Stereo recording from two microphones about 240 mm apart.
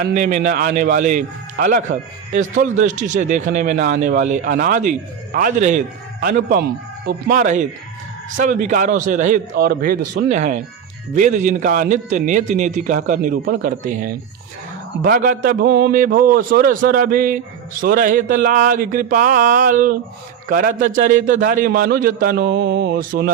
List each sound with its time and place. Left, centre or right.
0.0 s a man's voice: right